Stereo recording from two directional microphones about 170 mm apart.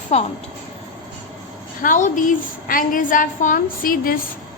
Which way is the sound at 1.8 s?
50° left (ahead or behind).